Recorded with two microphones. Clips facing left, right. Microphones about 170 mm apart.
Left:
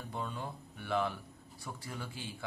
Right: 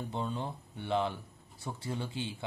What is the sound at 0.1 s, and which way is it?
A man's voice, 25° right (ahead or behind).